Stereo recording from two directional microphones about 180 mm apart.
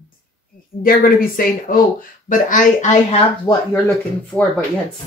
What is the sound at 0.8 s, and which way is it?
Speech, 55° left (ahead or behind).